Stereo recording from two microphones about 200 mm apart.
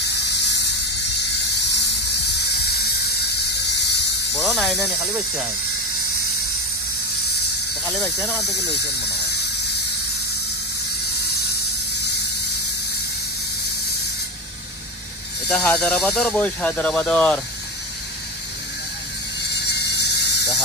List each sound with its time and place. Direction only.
2.3 s music: 55° left (ahead or behind)
3.6 s squeal: 60° left (ahead or behind)
4.4 s speech: centre (ahead or behind)
8.0 s speech: 10° left (ahead or behind)
15.4 s speech: 5° left (ahead or behind)
19.9 s squeal: 60° left (ahead or behind)